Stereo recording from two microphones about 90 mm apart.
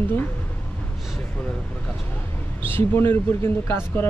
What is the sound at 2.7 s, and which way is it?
Speech, 25° left (ahead or behind).